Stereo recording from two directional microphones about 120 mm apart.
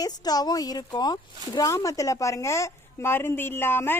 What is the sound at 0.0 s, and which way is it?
Speech, 35° left (ahead or behind).